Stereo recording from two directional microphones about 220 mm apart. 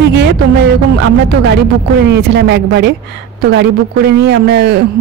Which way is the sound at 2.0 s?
50° right (ahead or behind).